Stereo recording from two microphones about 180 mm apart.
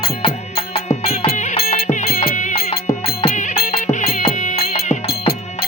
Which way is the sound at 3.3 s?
50° left (ahead or behind).